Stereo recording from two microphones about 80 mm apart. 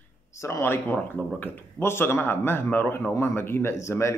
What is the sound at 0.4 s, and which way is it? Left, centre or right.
A man's voice, left.